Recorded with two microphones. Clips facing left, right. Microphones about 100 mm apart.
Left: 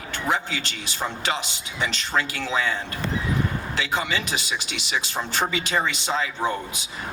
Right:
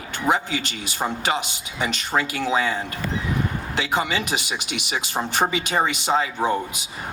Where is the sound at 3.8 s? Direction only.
20° right (ahead or behind).